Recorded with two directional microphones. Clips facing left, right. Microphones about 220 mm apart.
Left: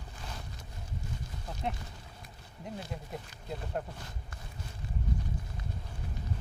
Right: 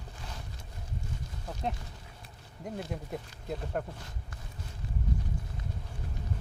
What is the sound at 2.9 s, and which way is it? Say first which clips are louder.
Speech: right 3 dB; 60° right (ahead or behind).